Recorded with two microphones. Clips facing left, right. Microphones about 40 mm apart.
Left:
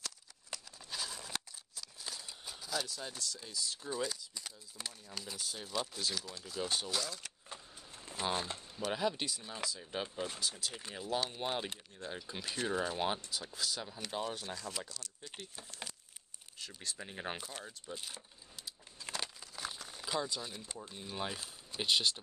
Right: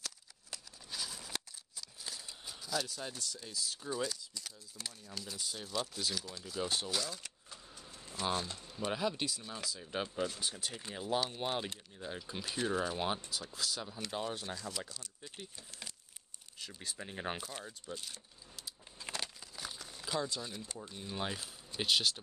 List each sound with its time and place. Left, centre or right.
0.0 s scissors: centre
3.4 s speech: centre
7.4 s vehicle: left
8.1 s speech: left
8.9 s speech: centre
16.5 s speech: centre
17.9 s speech: centre
19.1 s crumpling: centre
21.2 s speech: centre